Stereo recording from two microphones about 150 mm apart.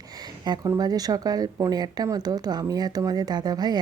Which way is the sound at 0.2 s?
25° right (ahead or behind).